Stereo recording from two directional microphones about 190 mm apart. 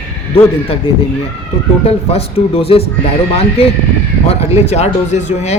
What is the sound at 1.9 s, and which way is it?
Speech, 30° left (ahead or behind).